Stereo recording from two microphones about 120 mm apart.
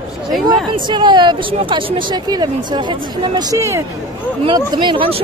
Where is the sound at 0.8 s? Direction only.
40° right (ahead or behind).